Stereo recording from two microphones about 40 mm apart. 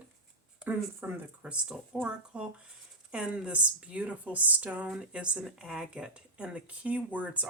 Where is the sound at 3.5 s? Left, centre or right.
Right.